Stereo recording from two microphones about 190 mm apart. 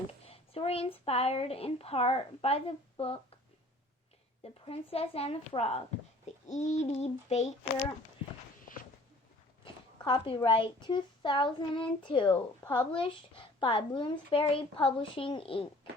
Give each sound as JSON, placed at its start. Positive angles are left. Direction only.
{"t": 0.3, "sound": "speech", "side_deg": 30}
{"t": 4.6, "sound": "speech", "side_deg": 30}
{"t": 10.0, "sound": "a child's voice", "side_deg": 25}